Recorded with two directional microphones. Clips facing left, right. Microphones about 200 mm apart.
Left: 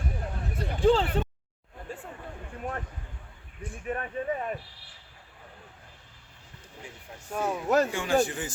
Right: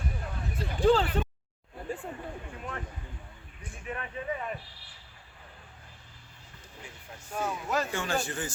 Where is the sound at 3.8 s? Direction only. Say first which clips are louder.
Left 5 dB; 45° left (ahead or behind).